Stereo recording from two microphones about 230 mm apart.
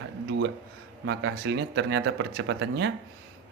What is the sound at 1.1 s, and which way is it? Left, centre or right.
A man's voice, right.